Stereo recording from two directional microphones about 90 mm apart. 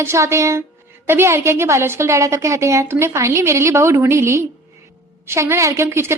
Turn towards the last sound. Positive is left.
turn(degrees=-30)  # may be behind; listen again after turning